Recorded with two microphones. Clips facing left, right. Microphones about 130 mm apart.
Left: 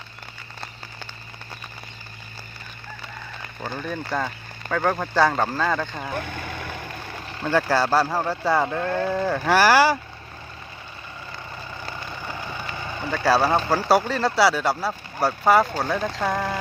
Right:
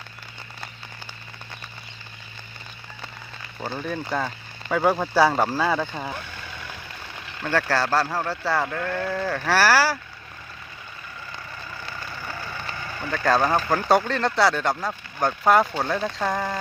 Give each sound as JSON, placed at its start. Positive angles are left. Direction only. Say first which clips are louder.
{"t": 3.8, "sound": "speech", "louder": "even", "side_deg": 0}
{"t": 6.1, "sound": "vehicle", "louder": "left 7 dB", "side_deg": 55}
{"t": 7.4, "sound": "speech", "louder": "left 2 dB", "side_deg": 10}
{"t": 12.3, "sound": "vehicle", "louder": "left 2 dB", "side_deg": 15}
{"t": 13.1, "sound": "speech", "louder": "left 1 dB", "side_deg": 5}